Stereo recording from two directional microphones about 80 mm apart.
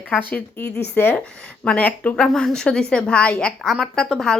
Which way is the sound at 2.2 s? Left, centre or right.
Centre.